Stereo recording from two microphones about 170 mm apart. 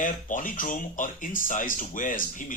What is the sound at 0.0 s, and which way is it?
Speech, 50° left (ahead or behind).